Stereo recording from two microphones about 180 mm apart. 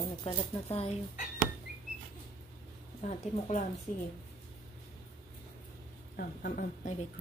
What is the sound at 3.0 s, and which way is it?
Speech, 35° left (ahead or behind).